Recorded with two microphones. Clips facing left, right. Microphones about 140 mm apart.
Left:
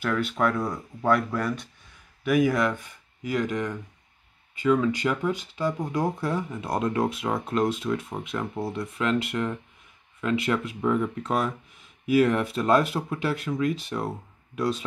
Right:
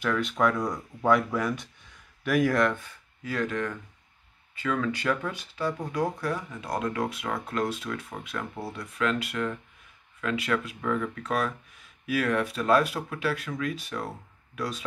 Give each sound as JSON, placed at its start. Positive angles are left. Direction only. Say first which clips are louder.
{"t": 0.0, "sound": "speech", "louder": "even", "side_deg": 5}
{"t": 2.8, "sound": "speech", "louder": "left 4 dB", "side_deg": 15}